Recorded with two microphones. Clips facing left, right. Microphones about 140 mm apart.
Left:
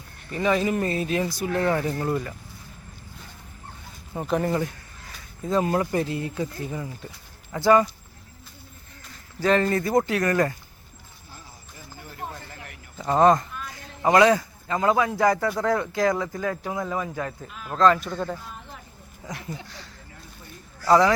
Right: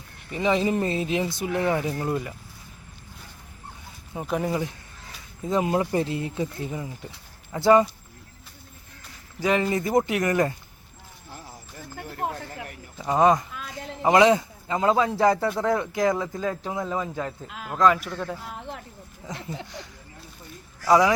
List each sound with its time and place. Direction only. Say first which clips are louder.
0.3 s speech: even; 15° right (ahead or behind)
4.1 s speech: left 2 dB; 5° right (ahead or behind)
5.5 s speech: even; 15° right (ahead or behind)
9.4 s speech: left 2 dB; 10° right (ahead or behind)
11.9 s a sound: right 6 dB; 65° right (ahead or behind)
13.0 s speech: left 1 dB; 10° right (ahead or behind)
14.0 s speech: even; 20° right (ahead or behind); by 18.3 s centre (ahead or behind)
18.4 s a sound: right 5 dB; 85° right
19.6 s speech: right 3 dB; 20° right (ahead or behind)